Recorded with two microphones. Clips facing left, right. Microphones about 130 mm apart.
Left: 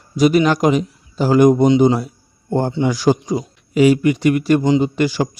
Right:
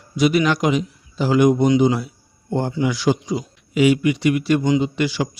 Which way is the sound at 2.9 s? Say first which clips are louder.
Left 4 dB; 40° left (ahead or behind).